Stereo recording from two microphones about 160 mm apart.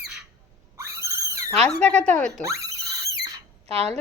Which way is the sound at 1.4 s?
5° left (ahead or behind).